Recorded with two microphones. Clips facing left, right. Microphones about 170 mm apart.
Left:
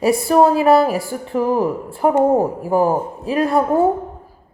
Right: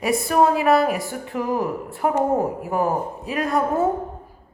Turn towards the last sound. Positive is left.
turn(degrees=30)  # may be behind; listen again after turning